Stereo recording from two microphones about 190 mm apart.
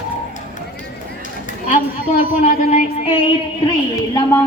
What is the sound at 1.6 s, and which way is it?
Child singing, 45° left (ahead or behind).